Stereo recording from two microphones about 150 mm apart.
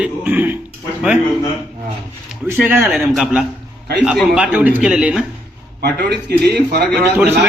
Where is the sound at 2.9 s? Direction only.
Centre (ahead or behind).